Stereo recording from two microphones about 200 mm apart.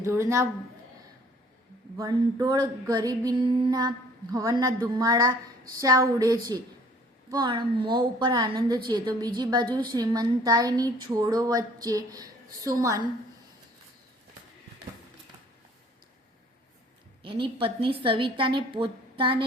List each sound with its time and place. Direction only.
0.0 s a woman's voice: 15° right (ahead or behind)
2.0 s female singing: 20° right (ahead or behind)
5.8 s a woman's voice: 20° right (ahead or behind)
7.3 s female singing: 20° right (ahead or behind)
17.2 s female singing: 25° right (ahead or behind)